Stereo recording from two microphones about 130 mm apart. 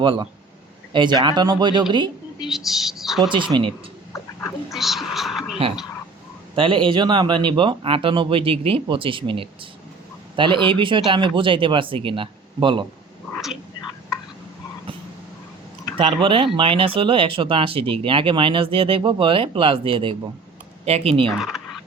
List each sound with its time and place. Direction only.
0.0 s speech: 40° right (ahead or behind)
2.4 s speech: centre (ahead or behind)
3.2 s speech: 40° right (ahead or behind)
4.1 s cat: 20° left (ahead or behind)
4.7 s a sound: centre (ahead or behind)
6.6 s speech: 40° right (ahead or behind)
16.0 s speech: 40° right (ahead or behind)
21.2 s speech: centre (ahead or behind)